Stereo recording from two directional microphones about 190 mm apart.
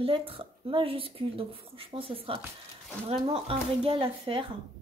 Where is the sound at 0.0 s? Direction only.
30° right (ahead or behind).